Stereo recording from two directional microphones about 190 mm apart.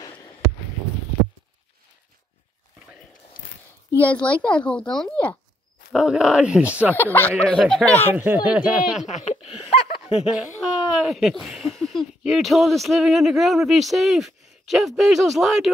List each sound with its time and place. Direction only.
4.0 s a woman's voice: 5° left (ahead or behind)
5.9 s speech: 5° right (ahead or behind)
7.0 s a woman's voice: 10° left (ahead or behind)
8.1 s speech: 10° right (ahead or behind)
9.0 s a sound: 40° left (ahead or behind)
10.2 s speech: centre (ahead or behind)